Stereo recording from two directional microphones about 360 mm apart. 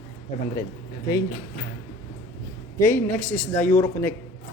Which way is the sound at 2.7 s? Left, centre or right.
Centre.